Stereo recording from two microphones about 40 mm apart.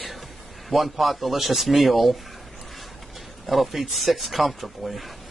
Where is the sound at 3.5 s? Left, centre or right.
Centre.